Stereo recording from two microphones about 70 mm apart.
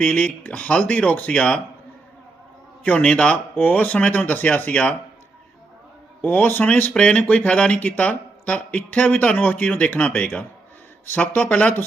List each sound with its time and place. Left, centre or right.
0.0 s speech: left
2.8 s speech: left
3.5 s speech: left
6.2 s speech: left